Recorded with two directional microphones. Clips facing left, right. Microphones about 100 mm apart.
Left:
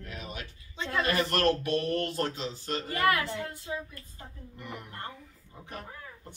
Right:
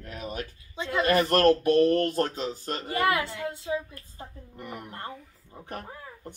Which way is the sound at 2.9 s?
20° right (ahead or behind).